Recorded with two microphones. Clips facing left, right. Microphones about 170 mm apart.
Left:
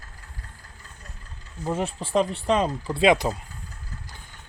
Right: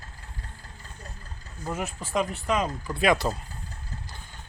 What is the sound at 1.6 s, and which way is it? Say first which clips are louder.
Speech: left 5 dB; 30° left (ahead or behind).